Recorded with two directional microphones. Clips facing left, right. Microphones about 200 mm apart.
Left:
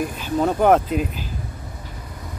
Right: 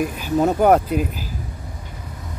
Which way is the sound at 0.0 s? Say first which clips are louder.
Right 2 dB; 10° right (ahead or behind).